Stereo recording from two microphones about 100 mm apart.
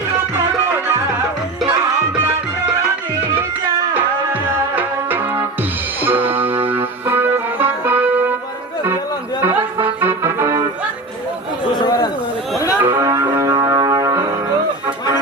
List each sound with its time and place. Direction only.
4.3 s music: 20° right (ahead or behind)
9.4 s music: 20° right (ahead or behind)
11.8 s chatter: 45° left (ahead or behind)
12.8 s music: 25° right (ahead or behind)